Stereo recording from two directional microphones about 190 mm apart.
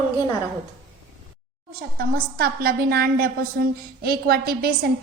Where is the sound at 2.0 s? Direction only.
55° right (ahead or behind).